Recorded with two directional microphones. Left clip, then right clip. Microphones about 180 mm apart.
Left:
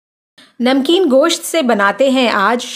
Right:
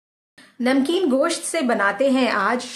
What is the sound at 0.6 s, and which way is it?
Speech, 55° left (ahead or behind).